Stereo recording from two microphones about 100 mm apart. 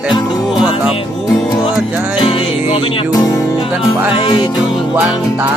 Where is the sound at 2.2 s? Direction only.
60° left (ahead or behind).